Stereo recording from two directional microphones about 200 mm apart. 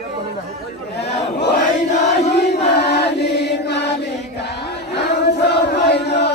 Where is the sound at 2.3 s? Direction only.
55° left (ahead or behind).